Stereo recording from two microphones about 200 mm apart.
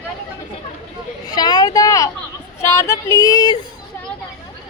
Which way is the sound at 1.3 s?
20° left (ahead or behind).